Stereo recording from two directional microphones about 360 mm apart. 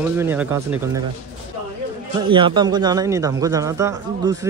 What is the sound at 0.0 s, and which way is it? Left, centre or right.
Speech, centre.